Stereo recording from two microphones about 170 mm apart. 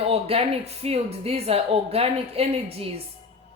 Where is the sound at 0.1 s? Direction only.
35° right (ahead or behind).